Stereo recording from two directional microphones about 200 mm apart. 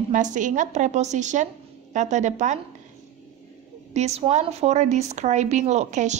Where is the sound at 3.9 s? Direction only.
35° right (ahead or behind).